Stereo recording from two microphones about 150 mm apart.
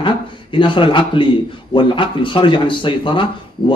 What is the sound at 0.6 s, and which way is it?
A man's voice, 35° left (ahead or behind).